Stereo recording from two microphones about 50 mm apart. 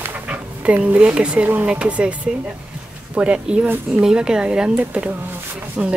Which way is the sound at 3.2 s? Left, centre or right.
Right.